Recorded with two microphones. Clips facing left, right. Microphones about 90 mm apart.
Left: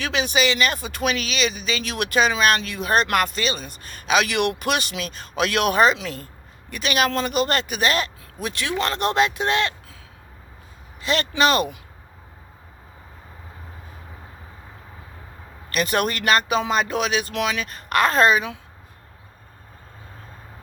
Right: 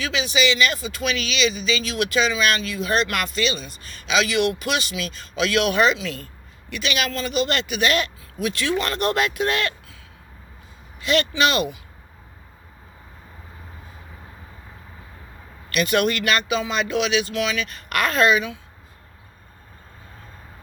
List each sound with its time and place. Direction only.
0.0 s speech: 50° left (ahead or behind); by 8.5 s 35° left (ahead or behind)
8.5 s speech: 20° left (ahead or behind)
11.0 s speech: 35° left (ahead or behind)
15.7 s speech: 35° left (ahead or behind)